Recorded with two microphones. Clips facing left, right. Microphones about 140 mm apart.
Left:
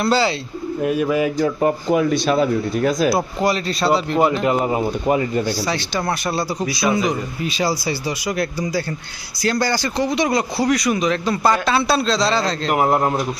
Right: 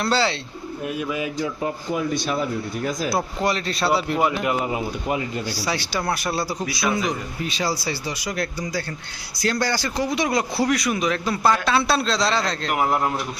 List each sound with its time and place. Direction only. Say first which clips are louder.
0.0 s speech: left 4 dB; 10° left (ahead or behind)
0.8 s speech: left 8 dB; 60° left (ahead or behind); by 3.1 s 90° left
3.4 s a man's voice: left 4 dB; centre (ahead or behind)
4.4 s speech: left 5 dB; 40° left (ahead or behind)
5.6 s a man's voice: left 3 dB; 10° right (ahead or behind)
7.1 s a man's voice: left 4 dB; 10° left (ahead or behind)
12.6 s a man's voice: left 6 dB; 40° left (ahead or behind)